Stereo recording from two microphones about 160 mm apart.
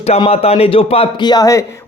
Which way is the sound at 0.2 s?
40° left (ahead or behind).